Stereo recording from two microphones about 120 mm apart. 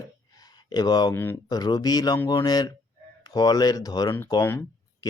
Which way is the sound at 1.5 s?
35° left (ahead or behind).